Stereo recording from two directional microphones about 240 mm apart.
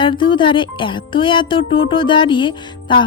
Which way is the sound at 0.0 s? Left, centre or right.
Left.